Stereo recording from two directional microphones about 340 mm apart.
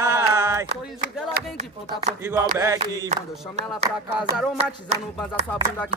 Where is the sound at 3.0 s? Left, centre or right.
Centre.